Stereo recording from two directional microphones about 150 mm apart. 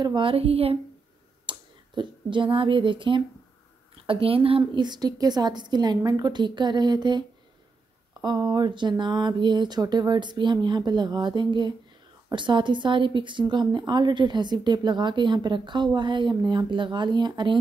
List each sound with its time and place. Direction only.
0.0 s a woman's voice: 35° right (ahead or behind)